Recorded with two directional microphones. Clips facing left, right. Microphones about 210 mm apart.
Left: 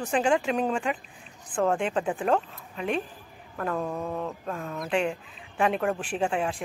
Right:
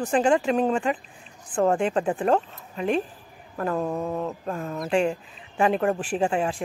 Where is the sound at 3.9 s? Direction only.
20° right (ahead or behind).